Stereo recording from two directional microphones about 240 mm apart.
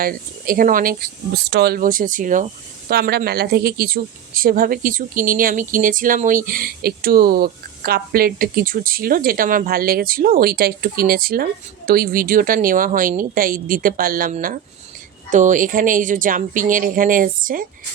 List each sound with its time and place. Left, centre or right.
0.0 s speech: right